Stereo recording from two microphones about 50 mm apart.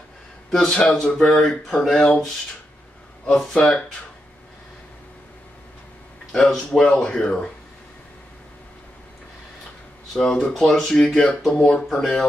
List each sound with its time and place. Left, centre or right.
0.5 s speech: centre
6.3 s speech: centre
10.1 s speech: centre